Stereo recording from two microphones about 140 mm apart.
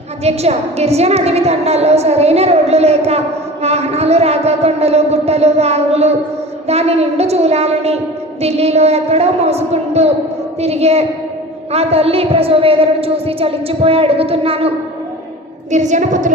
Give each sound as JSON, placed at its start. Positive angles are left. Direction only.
{"t": 0.2, "sound": "a woman's voice", "side_deg": -50}
{"t": 15.7, "sound": "a woman's voice", "side_deg": -60}